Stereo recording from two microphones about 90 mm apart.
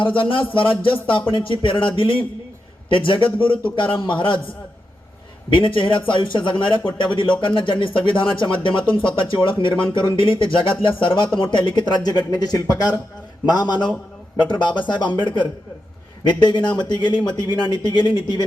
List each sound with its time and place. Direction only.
0.0 s speech: 70° left (ahead or behind)
16.2 s speech: 55° left (ahead or behind)